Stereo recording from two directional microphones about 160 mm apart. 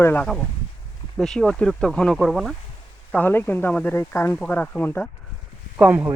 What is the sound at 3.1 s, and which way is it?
Speech, 10° left (ahead or behind).